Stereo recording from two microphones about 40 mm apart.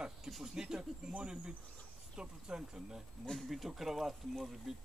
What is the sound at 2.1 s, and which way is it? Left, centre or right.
Speech, centre.